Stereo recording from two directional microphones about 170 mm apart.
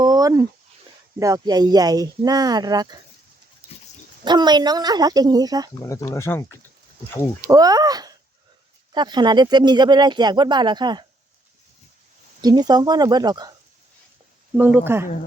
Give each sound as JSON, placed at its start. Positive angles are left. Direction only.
{"t": 0.0, "sound": "a sound", "side_deg": -25}
{"t": 1.2, "sound": "speech", "side_deg": -20}
{"t": 4.2, "sound": "speech", "side_deg": -25}
{"t": 5.8, "sound": "speech", "side_deg": 20}
{"t": 7.4, "sound": "speech", "side_deg": -20}
{"t": 12.4, "sound": "speech", "side_deg": -25}
{"t": 14.5, "sound": "speech", "side_deg": -10}